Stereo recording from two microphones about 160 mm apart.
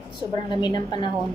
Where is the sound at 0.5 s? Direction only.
25° left (ahead or behind).